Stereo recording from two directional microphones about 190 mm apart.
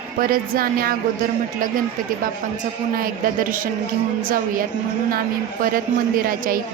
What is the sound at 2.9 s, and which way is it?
A woman's voice, 45° right (ahead or behind).